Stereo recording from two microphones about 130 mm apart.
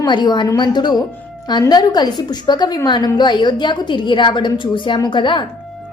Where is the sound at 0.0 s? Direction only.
35° left (ahead or behind).